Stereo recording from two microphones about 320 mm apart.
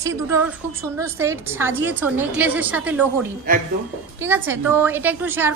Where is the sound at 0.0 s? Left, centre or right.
Centre.